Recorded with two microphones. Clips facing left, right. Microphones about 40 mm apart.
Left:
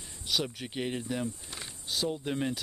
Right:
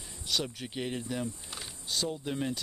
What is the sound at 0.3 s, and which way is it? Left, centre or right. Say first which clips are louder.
Cricket: left 1 dB; centre.